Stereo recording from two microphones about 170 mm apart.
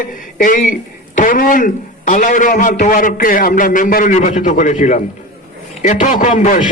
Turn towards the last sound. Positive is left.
turn(degrees=50)  # may be behind; listen again after turning